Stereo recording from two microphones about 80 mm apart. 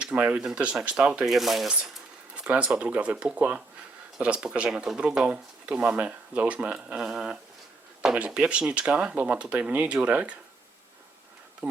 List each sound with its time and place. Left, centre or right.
0.0 s speech: centre
11.6 s speech: centre